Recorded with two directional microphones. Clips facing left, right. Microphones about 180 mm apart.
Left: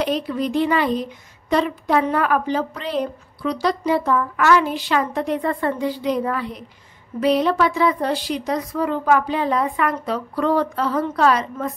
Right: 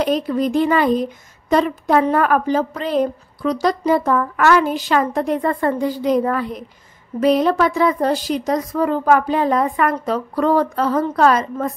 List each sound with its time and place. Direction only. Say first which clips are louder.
0.0 s a woman's voice: right 4 dB; 45° right (ahead or behind)